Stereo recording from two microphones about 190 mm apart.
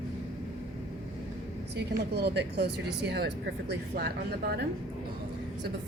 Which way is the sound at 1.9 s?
60° right (ahead or behind).